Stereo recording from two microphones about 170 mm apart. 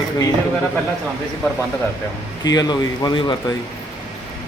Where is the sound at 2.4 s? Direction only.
25° left (ahead or behind).